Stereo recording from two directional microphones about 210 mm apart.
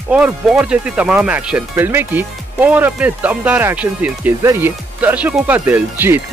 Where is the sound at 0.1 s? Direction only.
5° right (ahead or behind).